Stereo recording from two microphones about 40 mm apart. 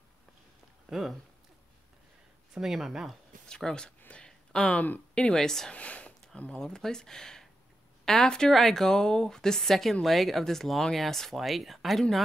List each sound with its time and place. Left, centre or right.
0.8 s a sound: centre
2.5 s speech: centre
3.4 s speech: left
4.1 s a sound: left
5.1 s a woman's voice: centre
5.7 s speech: left
6.6 s a woman's voice: centre